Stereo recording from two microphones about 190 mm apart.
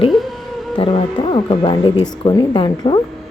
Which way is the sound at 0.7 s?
30° left (ahead or behind).